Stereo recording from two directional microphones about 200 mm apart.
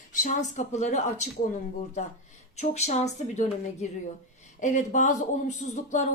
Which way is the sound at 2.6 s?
35° left (ahead or behind).